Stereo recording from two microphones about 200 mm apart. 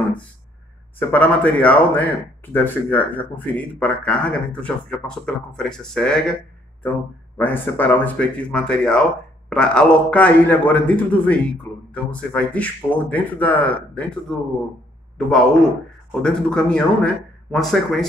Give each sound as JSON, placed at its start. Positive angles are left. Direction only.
{"t": 0.9, "sound": "a man's voice", "side_deg": 10}
{"t": 7.3, "sound": "a man's voice", "side_deg": 10}